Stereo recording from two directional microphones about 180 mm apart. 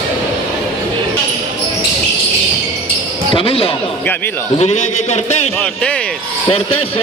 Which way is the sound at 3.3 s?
30° left (ahead or behind).